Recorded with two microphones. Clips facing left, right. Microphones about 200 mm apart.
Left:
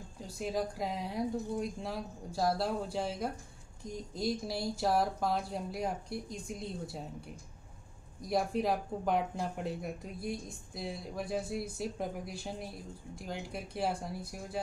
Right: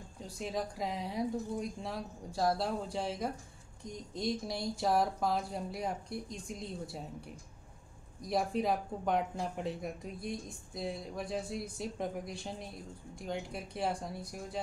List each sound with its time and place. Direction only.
0.2 s speech: centre (ahead or behind)
8.3 s speech: centre (ahead or behind)